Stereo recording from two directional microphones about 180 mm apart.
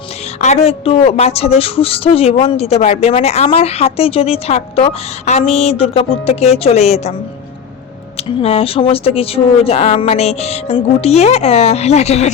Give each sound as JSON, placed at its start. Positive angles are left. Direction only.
{"t": 0.4, "sound": "a woman's voice", "side_deg": 35}
{"t": 8.1, "sound": "a woman's voice", "side_deg": 35}